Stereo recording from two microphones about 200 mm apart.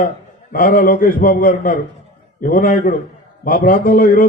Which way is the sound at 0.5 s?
45° left (ahead or behind).